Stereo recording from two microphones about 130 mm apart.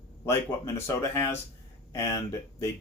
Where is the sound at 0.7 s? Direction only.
20° left (ahead or behind).